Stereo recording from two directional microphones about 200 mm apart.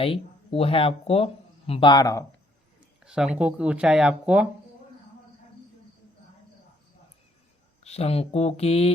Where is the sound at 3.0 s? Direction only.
5° right (ahead or behind).